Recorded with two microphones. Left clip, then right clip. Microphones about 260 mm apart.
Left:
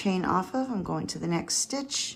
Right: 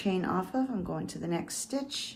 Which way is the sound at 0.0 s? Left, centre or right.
Left.